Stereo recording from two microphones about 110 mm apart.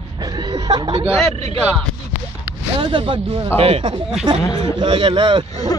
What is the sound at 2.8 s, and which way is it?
Speech, 50° right (ahead or behind).